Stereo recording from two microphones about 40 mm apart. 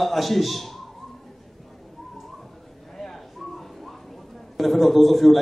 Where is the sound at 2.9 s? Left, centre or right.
Centre.